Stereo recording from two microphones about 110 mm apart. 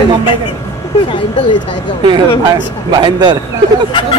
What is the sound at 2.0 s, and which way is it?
Speech, 40° right (ahead or behind).